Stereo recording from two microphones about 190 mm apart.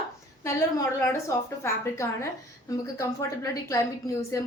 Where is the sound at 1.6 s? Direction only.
15° left (ahead or behind).